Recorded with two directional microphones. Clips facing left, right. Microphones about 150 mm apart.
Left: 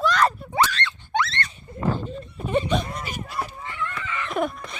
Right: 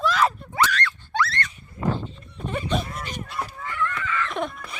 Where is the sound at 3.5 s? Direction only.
25° left (ahead or behind).